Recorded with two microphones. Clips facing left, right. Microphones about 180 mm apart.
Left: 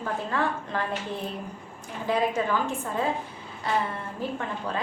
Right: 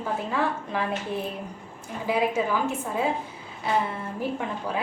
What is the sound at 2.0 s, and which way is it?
A woman's voice, 10° right (ahead or behind).